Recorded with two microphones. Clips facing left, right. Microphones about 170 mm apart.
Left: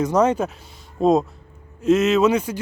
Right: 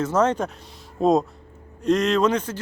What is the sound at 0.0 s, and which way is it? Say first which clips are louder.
Speech: left 3 dB; 10° left (ahead or behind).